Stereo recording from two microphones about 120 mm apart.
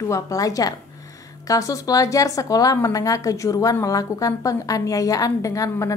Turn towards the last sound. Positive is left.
turn(degrees=25)  # may be behind; listen again after turning